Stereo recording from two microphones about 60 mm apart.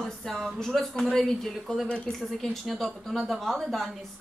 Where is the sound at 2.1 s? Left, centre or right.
Centre.